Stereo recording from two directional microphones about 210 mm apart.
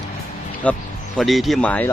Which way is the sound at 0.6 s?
5° left (ahead or behind).